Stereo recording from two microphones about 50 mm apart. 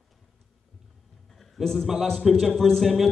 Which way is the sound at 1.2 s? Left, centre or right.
Centre.